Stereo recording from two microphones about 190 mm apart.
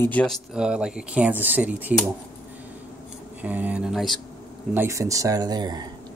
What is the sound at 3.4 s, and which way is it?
Speech, 10° right (ahead or behind).